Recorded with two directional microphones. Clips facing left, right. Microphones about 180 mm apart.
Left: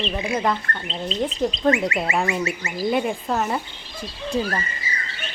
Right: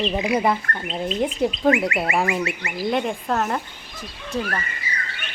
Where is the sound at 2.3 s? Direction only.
25° left (ahead or behind).